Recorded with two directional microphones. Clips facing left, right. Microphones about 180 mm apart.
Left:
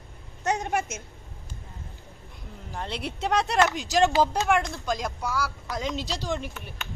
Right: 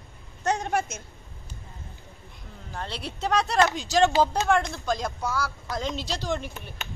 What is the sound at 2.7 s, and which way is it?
Speech, 20° left (ahead or behind).